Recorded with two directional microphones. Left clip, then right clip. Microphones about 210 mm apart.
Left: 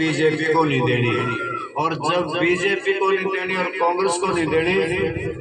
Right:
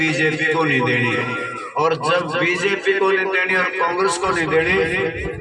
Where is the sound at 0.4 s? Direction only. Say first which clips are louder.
Right 1 dB; 25° right (ahead or behind).